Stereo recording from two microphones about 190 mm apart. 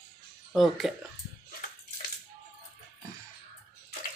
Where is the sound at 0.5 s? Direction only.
Centre (ahead or behind).